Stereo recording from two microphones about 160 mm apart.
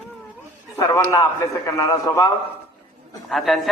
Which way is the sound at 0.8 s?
15° left (ahead or behind).